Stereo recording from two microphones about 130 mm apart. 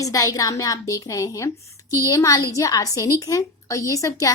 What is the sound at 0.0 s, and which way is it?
A woman's voice, 25° left (ahead or behind).